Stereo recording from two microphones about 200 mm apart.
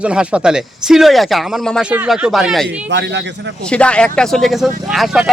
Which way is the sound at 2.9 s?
60° right (ahead or behind).